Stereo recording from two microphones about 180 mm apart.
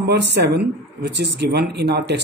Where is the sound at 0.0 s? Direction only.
75° right (ahead or behind).